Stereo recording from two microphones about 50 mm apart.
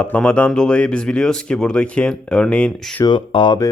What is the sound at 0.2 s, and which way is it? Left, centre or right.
Speech, left.